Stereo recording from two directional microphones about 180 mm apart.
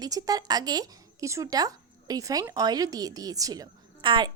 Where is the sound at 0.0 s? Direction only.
20° right (ahead or behind).